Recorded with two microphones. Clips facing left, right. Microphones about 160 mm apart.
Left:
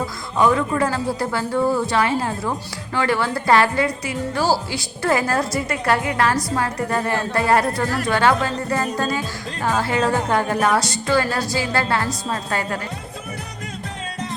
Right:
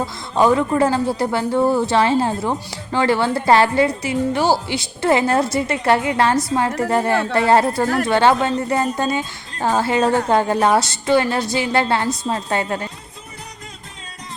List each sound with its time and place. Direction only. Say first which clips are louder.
0.0 s speech: right 2 dB; 30° right (ahead or behind)